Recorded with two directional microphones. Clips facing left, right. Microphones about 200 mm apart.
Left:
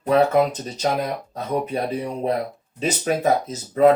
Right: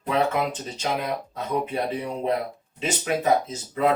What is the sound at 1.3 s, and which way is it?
Speech, 40° left (ahead or behind).